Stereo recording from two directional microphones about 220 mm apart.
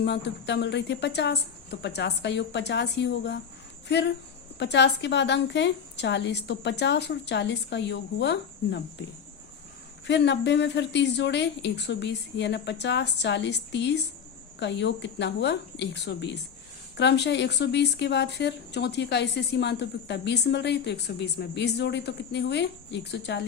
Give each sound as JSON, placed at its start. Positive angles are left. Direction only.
{"t": 0.0, "sound": "speech", "side_deg": 50}
{"t": 10.1, "sound": "speech", "side_deg": 50}